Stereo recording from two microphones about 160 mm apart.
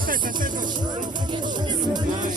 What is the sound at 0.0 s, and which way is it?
Music, 60° right (ahead or behind).